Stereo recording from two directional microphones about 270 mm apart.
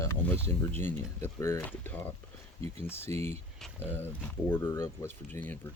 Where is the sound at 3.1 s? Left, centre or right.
Centre.